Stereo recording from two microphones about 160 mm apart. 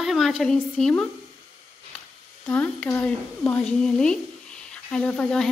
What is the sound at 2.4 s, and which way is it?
A woman's voice, 10° left (ahead or behind).